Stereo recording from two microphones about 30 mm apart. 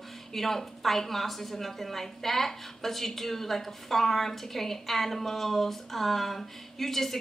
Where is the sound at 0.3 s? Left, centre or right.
Centre.